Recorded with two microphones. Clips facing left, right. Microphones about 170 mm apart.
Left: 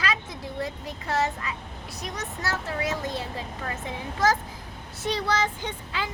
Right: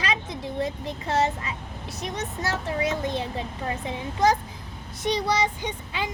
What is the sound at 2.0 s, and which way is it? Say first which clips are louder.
A child's voice: right 3 dB; 20° right (ahead or behind).